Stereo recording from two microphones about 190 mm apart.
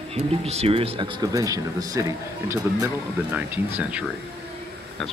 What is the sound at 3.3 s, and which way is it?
Speech, 10° right (ahead or behind).